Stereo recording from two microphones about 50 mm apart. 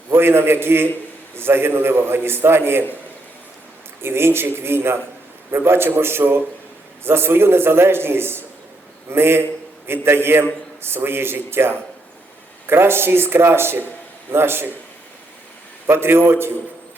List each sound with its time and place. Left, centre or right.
0.1 s a man's voice: right
4.0 s a man's voice: right
15.9 s a man's voice: right